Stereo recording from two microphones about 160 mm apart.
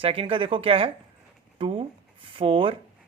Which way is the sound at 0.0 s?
35° right (ahead or behind).